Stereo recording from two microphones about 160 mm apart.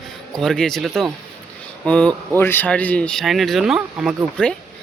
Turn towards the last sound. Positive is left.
turn(degrees=-10)  # may be behind; listen again after turning